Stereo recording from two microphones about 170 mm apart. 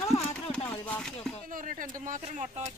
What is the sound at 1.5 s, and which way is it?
Speech, 50° right (ahead or behind).